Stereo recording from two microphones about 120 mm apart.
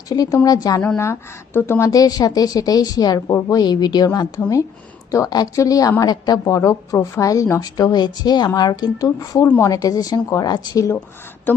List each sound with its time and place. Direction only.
0.1 s a woman's voice: 30° left (ahead or behind)
11.5 s speech: 15° left (ahead or behind)